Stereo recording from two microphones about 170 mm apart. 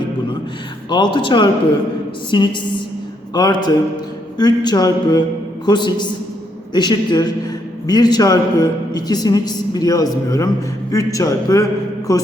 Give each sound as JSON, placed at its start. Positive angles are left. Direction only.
{"t": 0.9, "sound": "a man's voice", "side_deg": 25}